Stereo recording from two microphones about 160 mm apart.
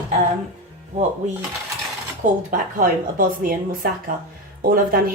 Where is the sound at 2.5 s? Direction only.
55° right (ahead or behind).